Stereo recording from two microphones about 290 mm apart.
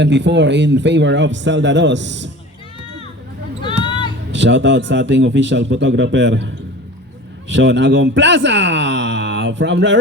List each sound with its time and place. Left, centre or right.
0.0 s speech: right
3.8 s a sound: centre
4.3 s speech: right